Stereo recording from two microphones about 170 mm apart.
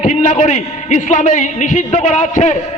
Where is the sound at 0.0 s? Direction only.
45° left (ahead or behind).